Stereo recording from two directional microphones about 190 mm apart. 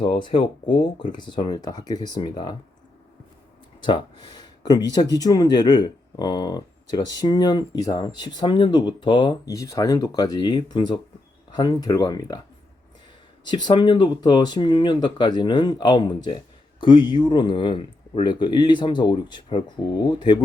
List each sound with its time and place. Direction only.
0.0 s speech: 25° left (ahead or behind)
3.8 s speech: 25° left (ahead or behind)
13.4 s speech: 25° left (ahead or behind)